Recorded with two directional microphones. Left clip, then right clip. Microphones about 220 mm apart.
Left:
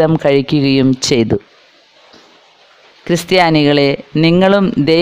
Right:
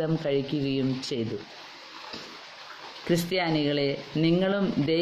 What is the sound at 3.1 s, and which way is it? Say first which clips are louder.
Speech: left 15 dB; 45° left (ahead or behind).